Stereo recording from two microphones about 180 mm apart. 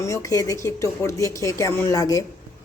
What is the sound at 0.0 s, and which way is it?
Speech, 15° left (ahead or behind).